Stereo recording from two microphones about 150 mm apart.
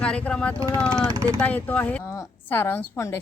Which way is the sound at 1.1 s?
20° right (ahead or behind).